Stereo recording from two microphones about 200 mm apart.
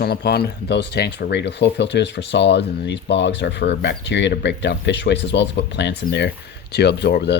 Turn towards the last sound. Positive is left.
turn(degrees=55)  # may be behind; listen again after turning